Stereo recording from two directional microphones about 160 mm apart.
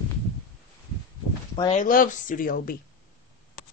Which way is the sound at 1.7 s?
55° left (ahead or behind).